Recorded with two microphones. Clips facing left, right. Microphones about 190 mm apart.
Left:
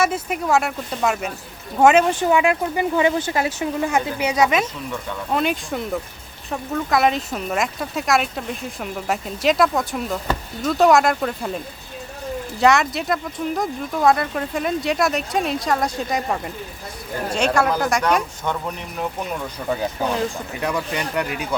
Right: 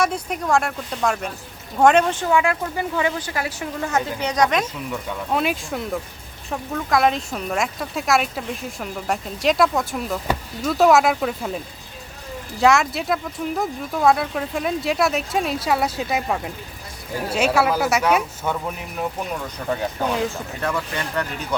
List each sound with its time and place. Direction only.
0.0 s speech: 5° left (ahead or behind)
2.2 s speech: 20° left (ahead or behind); by 20.3 s centre (ahead or behind)
20.3 s speech: 15° left (ahead or behind)